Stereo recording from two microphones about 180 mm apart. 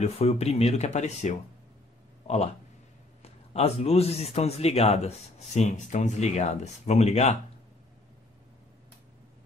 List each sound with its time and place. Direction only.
0.0 s a man's voice: 35° left (ahead or behind)